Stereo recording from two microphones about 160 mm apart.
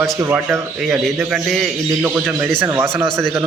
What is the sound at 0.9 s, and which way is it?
Speech, 5° right (ahead or behind).